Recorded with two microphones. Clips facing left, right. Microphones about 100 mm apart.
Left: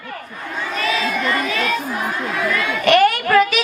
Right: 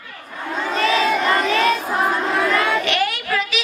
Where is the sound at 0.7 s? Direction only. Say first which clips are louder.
Right 4 dB; 40° right (ahead or behind).